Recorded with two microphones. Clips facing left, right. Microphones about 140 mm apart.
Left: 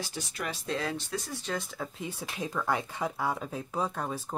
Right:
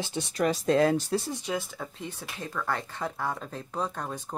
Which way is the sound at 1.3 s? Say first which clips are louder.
Right 3 dB; 15° right (ahead or behind).